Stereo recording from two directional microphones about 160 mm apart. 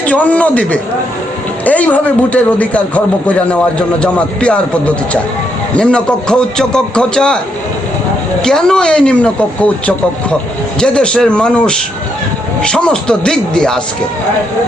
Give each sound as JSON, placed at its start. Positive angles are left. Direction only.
{"t": 0.0, "sound": "a man's voice", "side_deg": 10}
{"t": 8.4, "sound": "a man's voice", "side_deg": 5}